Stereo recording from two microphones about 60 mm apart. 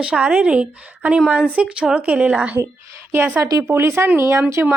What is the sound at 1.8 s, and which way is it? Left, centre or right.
Speech, centre.